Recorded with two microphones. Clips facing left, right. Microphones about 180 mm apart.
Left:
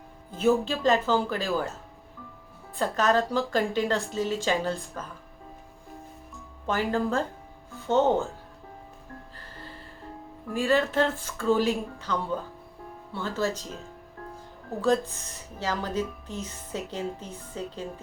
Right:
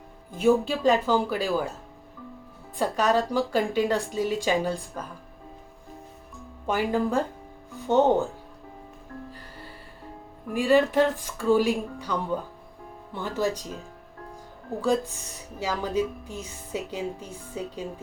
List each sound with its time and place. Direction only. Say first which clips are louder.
0.3 s a woman's voice: right 2 dB; 15° right (ahead or behind)
2.7 s a woman's voice: right 1 dB; 10° right (ahead or behind)
6.7 s a woman's voice: right 2 dB; 10° right (ahead or behind)
10.5 s a woman's voice: right 4 dB; 15° right (ahead or behind)
14.8 s a woman's voice: even; 10° right (ahead or behind)